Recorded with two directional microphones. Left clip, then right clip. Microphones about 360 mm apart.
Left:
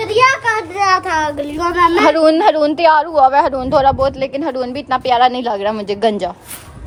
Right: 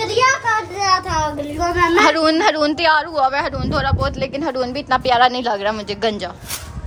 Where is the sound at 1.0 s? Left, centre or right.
Centre.